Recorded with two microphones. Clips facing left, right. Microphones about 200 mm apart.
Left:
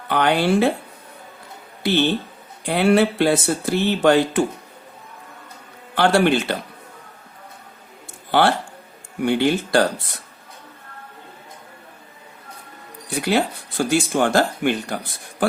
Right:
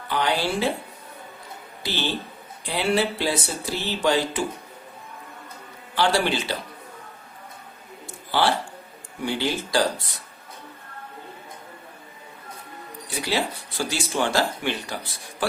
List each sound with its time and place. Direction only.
0.1 s speech: 60° left (ahead or behind)
1.8 s speech: 55° left (ahead or behind)
5.9 s speech: 55° left (ahead or behind)
8.3 s speech: 60° left (ahead or behind)
13.1 s speech: 55° left (ahead or behind)